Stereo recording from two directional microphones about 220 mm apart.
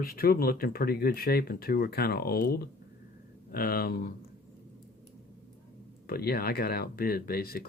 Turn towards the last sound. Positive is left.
turn(degrees=45)  # may be behind; listen again after turning